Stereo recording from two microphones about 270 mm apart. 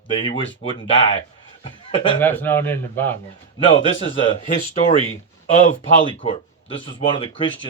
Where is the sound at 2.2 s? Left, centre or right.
Centre.